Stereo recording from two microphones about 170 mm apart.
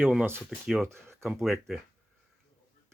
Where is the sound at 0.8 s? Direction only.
15° right (ahead or behind).